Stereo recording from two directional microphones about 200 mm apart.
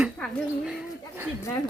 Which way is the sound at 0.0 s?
5° right (ahead or behind).